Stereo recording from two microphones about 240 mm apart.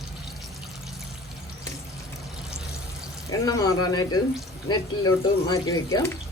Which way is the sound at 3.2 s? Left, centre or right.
Centre.